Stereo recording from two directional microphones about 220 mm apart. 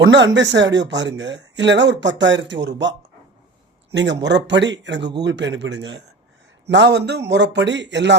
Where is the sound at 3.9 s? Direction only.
50° right (ahead or behind).